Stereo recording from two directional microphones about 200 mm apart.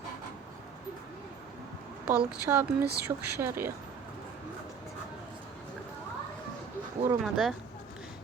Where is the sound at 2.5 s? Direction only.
15° right (ahead or behind).